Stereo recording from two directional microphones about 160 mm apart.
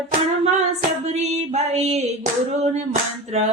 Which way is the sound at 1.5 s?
40° right (ahead or behind).